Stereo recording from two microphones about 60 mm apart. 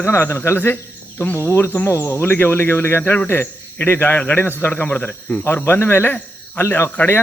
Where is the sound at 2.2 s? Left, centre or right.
Left.